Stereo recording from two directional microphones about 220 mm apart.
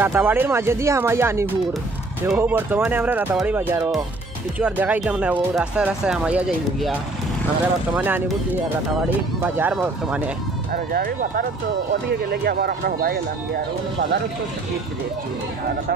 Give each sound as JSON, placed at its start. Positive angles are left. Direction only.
{"t": 0.0, "sound": "speech", "side_deg": -10}
{"t": 9.4, "sound": "speech", "side_deg": -5}
{"t": 10.7, "sound": "speech", "side_deg": -40}